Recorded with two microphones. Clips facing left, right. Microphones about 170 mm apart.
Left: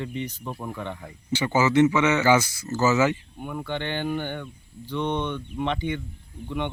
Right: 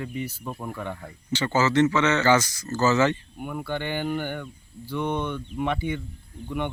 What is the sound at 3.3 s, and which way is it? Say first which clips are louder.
Speech: even; 10° right (ahead or behind).